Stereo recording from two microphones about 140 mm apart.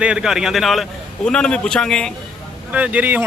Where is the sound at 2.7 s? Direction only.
10° right (ahead or behind).